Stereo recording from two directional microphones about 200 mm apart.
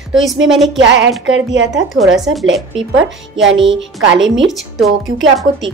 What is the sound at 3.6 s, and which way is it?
Speech, 70° right (ahead or behind).